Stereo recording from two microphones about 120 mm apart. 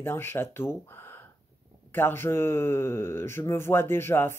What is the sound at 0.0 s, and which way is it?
Speech, 20° left (ahead or behind).